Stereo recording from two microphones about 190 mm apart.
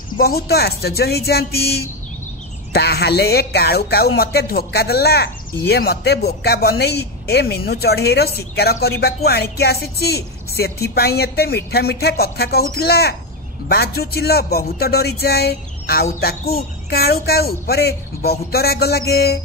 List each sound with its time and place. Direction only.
0.2 s speech: 55° left (ahead or behind)